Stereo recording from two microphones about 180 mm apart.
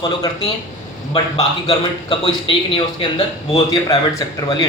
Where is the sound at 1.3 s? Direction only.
20° left (ahead or behind).